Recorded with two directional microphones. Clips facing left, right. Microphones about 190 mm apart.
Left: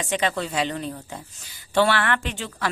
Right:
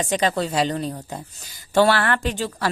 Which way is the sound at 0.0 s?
35° right (ahead or behind).